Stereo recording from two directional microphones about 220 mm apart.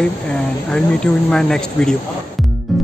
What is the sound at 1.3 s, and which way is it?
Speech, 5° left (ahead or behind).